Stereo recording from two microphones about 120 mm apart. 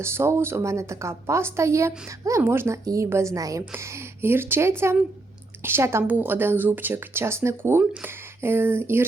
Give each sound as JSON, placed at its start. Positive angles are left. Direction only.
{"t": 0.0, "sound": "a woman's voice", "side_deg": -20}